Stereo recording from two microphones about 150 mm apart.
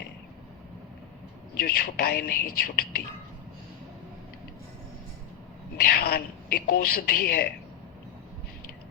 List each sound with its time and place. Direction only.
1.5 s a man's voice: 90° left
5.7 s a man's voice: 80° left